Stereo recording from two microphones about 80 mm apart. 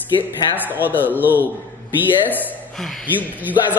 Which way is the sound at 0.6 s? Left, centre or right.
Right.